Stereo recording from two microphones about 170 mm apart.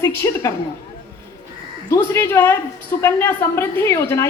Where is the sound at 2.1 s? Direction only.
15° left (ahead or behind).